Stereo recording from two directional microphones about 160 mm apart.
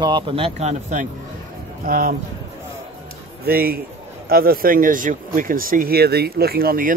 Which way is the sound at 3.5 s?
70° right (ahead or behind).